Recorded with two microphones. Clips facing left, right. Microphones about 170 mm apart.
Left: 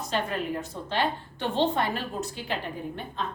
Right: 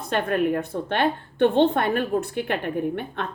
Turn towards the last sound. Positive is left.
turn(degrees=-65)  # may be behind; listen again after turning